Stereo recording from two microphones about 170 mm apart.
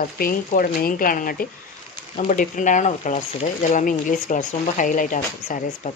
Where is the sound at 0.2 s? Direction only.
55° left (ahead or behind).